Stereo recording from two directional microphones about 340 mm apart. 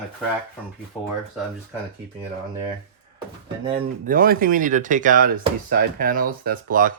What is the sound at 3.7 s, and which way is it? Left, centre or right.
Speech, centre.